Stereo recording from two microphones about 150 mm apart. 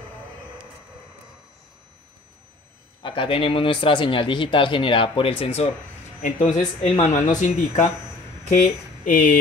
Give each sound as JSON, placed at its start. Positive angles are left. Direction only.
{"t": 3.0, "sound": "a man's voice", "side_deg": 35}
{"t": 6.2, "sound": "speech", "side_deg": 55}